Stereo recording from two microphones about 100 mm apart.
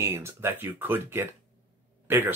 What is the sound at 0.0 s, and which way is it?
Speech, 25° right (ahead or behind).